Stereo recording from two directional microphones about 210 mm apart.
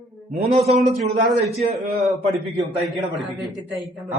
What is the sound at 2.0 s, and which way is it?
A man's voice, centre (ahead or behind).